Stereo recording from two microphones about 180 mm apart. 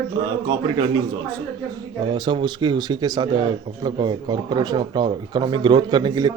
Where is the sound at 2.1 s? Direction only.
25° right (ahead or behind).